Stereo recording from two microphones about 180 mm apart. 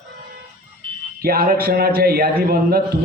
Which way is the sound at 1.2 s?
55° right (ahead or behind).